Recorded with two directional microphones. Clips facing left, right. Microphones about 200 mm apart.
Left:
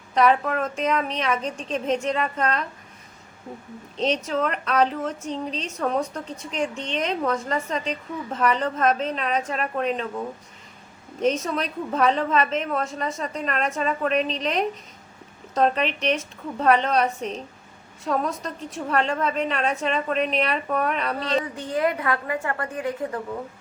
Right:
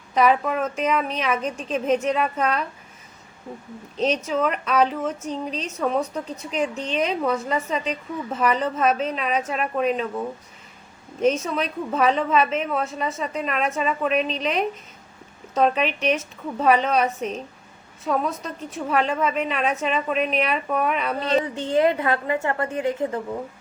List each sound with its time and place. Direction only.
0.1 s a woman's voice: 10° right (ahead or behind)
3.9 s a woman's voice: 5° right (ahead or behind)
5.5 s a woman's voice: 30° left (ahead or behind)
6.8 s a woman's voice: 5° right (ahead or behind)
21.2 s a woman's voice: 30° right (ahead or behind)